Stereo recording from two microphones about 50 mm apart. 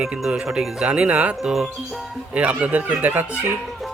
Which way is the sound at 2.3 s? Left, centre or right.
Right.